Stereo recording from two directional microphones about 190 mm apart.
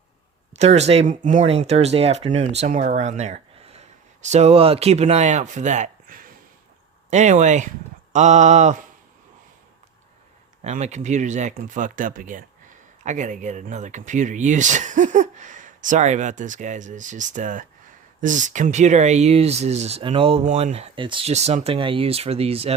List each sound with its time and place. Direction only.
0.5 s speech: 35° right (ahead or behind)
10.6 s speech: 35° right (ahead or behind)